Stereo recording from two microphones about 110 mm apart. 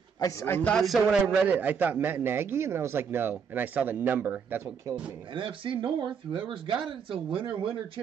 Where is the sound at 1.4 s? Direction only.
15° right (ahead or behind).